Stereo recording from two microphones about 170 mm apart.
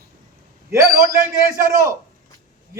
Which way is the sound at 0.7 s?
15° right (ahead or behind).